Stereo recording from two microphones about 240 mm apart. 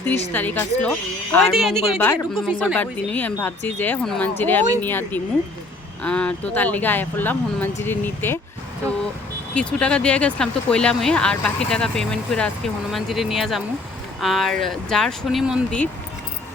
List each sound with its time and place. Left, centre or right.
0.3 s speech: centre
9.6 s speech: centre